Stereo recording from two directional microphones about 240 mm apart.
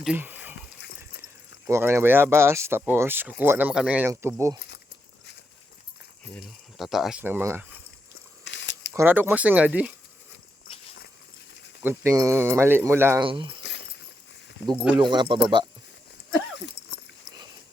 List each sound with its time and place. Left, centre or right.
0.0 s a sound: centre
0.8 s a sound: left
1.6 s speech: centre
6.7 s speech: centre
8.4 s a sound: left
8.9 s speech: centre
11.8 s speech: centre
13.2 s speech: right
13.6 s keys jangling: left
14.9 s speech: centre